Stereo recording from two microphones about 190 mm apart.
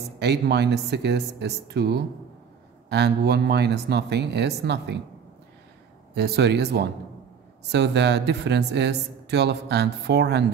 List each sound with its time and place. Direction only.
0.2 s speech: 60° right (ahead or behind)
6.1 s speech: 60° right (ahead or behind)